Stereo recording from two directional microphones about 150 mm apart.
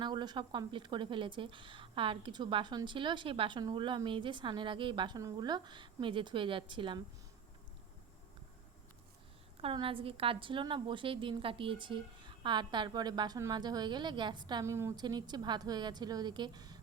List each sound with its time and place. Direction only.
0.0 s a woman's voice: 30° right (ahead or behind)
9.6 s a woman's voice: 35° right (ahead or behind)
14.6 s a woman's voice: 20° right (ahead or behind)